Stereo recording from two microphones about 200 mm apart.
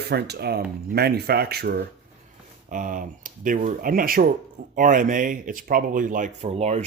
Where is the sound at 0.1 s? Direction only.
55° right (ahead or behind).